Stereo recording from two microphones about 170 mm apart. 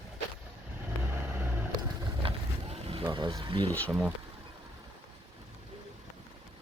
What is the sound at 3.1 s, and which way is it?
Speech, 25° right (ahead or behind).